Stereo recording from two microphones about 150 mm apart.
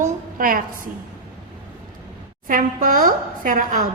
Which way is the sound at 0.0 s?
70° right (ahead or behind).